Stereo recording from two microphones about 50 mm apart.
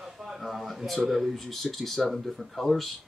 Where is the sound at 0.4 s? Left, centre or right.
Centre.